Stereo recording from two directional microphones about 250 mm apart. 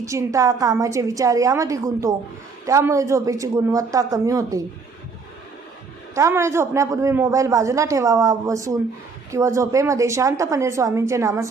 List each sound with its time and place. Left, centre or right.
0.0 s a man's voice: centre
6.1 s a man's voice: centre